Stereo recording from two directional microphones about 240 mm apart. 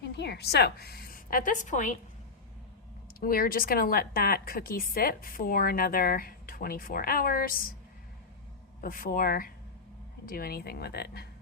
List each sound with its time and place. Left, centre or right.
0.0 s a woman's voice: left
3.2 s speech: left
8.8 s speech: left